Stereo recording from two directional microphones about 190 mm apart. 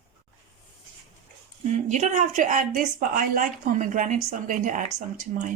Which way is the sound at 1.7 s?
40° right (ahead or behind).